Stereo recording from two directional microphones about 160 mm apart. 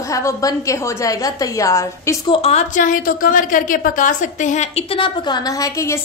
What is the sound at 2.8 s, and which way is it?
A woman's voice, 55° left (ahead or behind).